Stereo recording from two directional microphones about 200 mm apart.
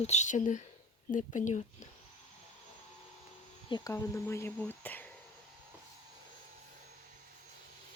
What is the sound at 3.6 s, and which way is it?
Speech, 20° left (ahead or behind).